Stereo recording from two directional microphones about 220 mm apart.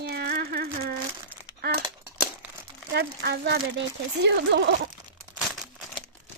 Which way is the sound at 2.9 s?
50° right (ahead or behind).